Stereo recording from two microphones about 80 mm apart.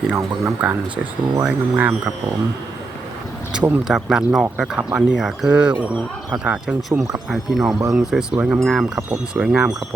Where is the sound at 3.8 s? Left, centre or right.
Centre.